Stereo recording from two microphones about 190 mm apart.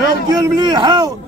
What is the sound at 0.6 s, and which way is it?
Speech, 20° right (ahead or behind).